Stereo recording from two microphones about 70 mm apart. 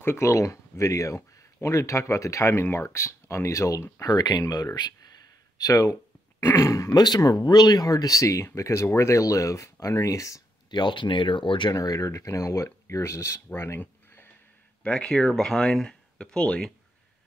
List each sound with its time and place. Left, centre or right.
0.0 s speech: left
4.0 s speech: left
4.7 s speech: left
5.6 s speech: left
7.2 s speech: left
10.7 s speech: left
11.7 s speech: left
13.5 s a sound: left
14.8 s speech: centre